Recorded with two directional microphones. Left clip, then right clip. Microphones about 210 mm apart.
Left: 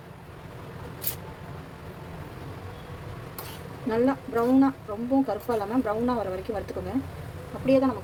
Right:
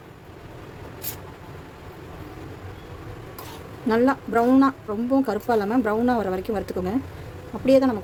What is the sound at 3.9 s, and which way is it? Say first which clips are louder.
Speech: right 5 dB; 45° right (ahead or behind).